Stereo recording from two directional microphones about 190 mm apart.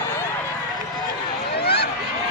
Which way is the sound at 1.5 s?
60° left (ahead or behind).